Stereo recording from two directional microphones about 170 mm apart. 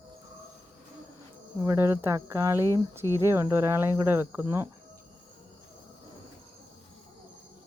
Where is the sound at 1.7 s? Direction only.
15° right (ahead or behind).